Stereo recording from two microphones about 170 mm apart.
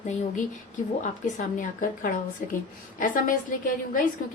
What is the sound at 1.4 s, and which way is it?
A woman's voice, 50° left (ahead or behind).